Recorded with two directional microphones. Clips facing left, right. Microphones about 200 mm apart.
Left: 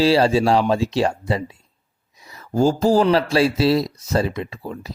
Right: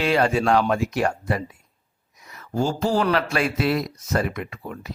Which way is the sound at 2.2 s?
30° left (ahead or behind).